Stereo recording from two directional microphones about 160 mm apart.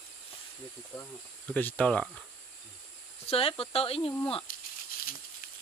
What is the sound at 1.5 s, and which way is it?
Speech, 10° left (ahead or behind).